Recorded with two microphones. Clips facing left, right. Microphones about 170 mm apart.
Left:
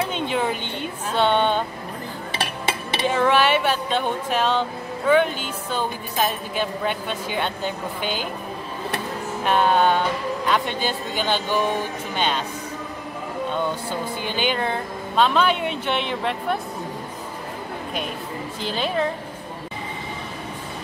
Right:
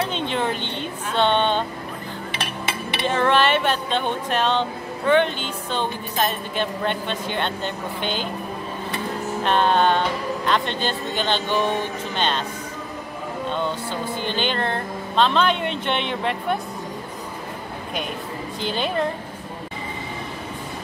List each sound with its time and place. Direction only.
0.1 s speech: 10° left (ahead or behind)
3.1 s speech: 10° left (ahead or behind)
9.4 s speech: 10° left (ahead or behind)
13.5 s speech: 10° left (ahead or behind)
18.6 s a woman's voice: centre (ahead or behind)